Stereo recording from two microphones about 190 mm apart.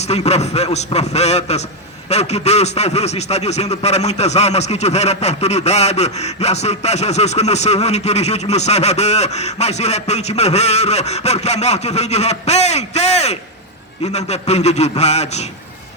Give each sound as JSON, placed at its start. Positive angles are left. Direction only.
{"t": 0.0, "sound": "a man's voice", "side_deg": 35}